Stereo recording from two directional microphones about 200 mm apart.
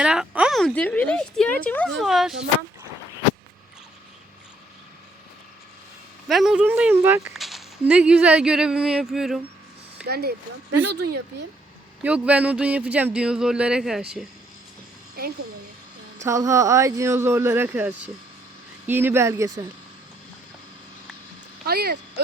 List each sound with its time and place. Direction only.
0.0 s speech: 5° right (ahead or behind)
6.2 s speech: centre (ahead or behind)
10.1 s speech: 55° right (ahead or behind)
12.0 s speech: 5° right (ahead or behind)
15.2 s speech: 50° right (ahead or behind)
16.2 s speech: 15° right (ahead or behind)
21.7 s speech: 55° right (ahead or behind)